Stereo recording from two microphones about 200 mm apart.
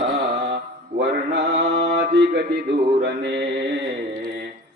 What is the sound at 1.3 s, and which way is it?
Mantra, 60° right (ahead or behind).